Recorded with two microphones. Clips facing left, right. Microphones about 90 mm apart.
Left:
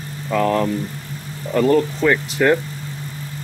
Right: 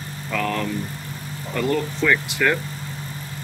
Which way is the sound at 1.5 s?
40° left (ahead or behind).